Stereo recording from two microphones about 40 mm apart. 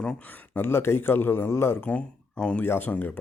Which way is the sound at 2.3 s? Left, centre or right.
Left.